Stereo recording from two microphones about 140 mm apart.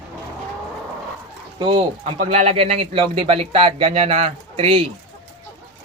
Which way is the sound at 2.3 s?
45° right (ahead or behind).